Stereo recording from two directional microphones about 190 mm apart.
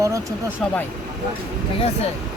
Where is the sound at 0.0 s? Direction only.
15° right (ahead or behind).